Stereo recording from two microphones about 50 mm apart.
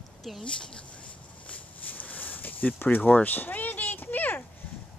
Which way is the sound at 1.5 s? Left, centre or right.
Left.